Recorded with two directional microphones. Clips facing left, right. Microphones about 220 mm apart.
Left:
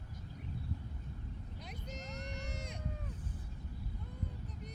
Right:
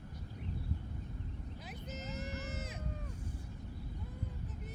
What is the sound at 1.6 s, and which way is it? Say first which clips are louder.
Sheep: right 1 dB; 5° right (ahead or behind).